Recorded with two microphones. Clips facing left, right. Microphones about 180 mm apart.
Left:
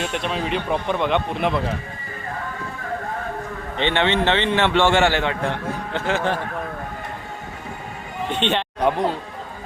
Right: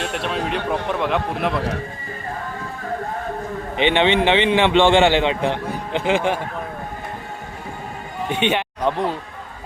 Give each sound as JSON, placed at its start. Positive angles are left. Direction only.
{"t": 0.0, "sound": "a man's voice", "side_deg": 0}
{"t": 3.8, "sound": "a man's voice", "side_deg": -15}
{"t": 8.3, "sound": "a man's voice", "side_deg": -10}